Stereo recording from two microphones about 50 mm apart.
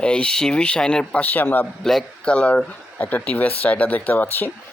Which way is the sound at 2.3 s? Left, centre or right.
Left.